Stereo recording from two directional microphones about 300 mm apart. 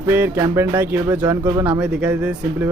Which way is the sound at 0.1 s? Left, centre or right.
Centre.